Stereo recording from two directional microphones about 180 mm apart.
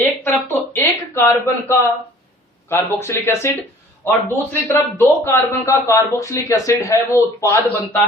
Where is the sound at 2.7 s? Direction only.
15° left (ahead or behind).